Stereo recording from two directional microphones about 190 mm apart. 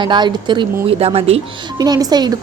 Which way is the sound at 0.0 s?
25° right (ahead or behind).